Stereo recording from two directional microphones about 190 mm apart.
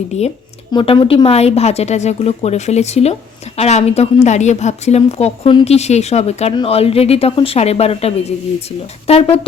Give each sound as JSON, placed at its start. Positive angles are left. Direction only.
{"t": 0.1, "sound": "a woman's voice", "side_deg": 35}
{"t": 0.7, "sound": "a woman's voice", "side_deg": 25}